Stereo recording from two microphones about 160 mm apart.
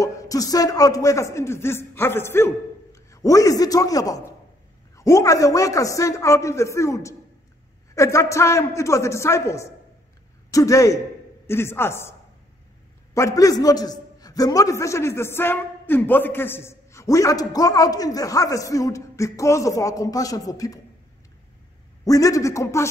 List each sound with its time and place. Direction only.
0.0 s a man's voice: 20° left (ahead or behind)
22.0 s a man's voice: 20° left (ahead or behind)